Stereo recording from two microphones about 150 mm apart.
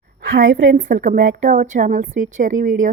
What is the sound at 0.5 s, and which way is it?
A woman's voice, 65° right (ahead or behind).